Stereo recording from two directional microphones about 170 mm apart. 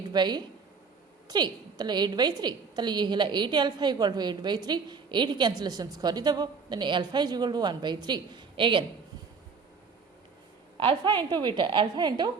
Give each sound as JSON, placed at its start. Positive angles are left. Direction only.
{"t": 0.1, "sound": "a woman's voice", "side_deg": -25}
{"t": 10.8, "sound": "a woman's voice", "side_deg": -30}